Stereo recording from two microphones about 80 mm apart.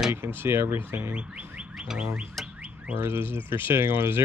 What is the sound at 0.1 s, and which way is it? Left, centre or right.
Speech, right.